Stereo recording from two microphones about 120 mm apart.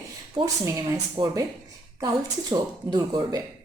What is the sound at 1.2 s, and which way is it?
Speech, 45° right (ahead or behind).